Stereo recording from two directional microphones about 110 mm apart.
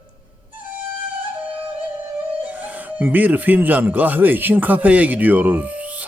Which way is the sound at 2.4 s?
15° right (ahead or behind).